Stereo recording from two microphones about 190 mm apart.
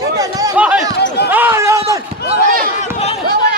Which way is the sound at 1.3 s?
10° right (ahead or behind).